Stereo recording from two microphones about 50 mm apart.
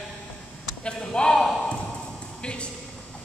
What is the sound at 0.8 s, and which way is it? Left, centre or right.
A man's voice, centre.